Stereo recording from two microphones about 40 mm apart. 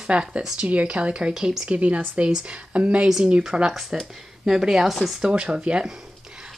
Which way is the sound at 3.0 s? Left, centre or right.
Centre.